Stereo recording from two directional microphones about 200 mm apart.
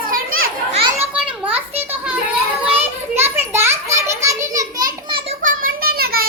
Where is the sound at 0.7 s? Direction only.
30° right (ahead or behind).